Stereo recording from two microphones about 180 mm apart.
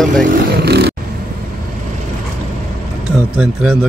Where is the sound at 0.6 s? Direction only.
65° right (ahead or behind).